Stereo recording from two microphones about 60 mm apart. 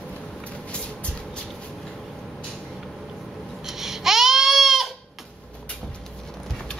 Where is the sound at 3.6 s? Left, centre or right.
Centre.